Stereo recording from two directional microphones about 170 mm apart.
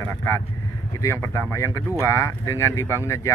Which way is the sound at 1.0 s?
15° left (ahead or behind).